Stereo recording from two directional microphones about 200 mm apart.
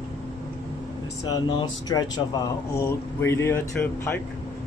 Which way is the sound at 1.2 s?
20° left (ahead or behind).